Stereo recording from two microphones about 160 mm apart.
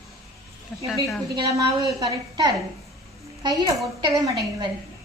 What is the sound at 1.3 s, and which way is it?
Speech, 20° right (ahead or behind).